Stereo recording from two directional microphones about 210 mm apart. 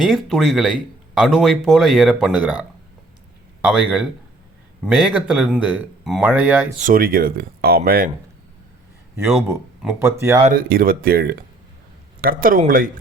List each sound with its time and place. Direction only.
0.0 s speech: centre (ahead or behind)
6.8 s speech: 40° right (ahead or behind)
9.8 s speech: 10° right (ahead or behind)
10.4 s speech: 45° right (ahead or behind)